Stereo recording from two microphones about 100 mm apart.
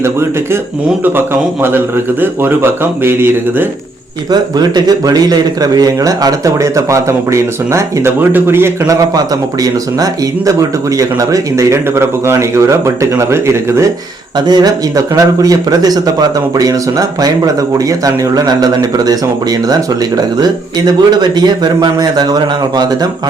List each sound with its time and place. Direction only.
0.0 s speech: 25° right (ahead or behind)
4.3 s speech: 45° right (ahead or behind); by 9.0 s 25° right (ahead or behind)
9.1 s speech: 40° right (ahead or behind)
14.3 s a man's voice: 45° right (ahead or behind)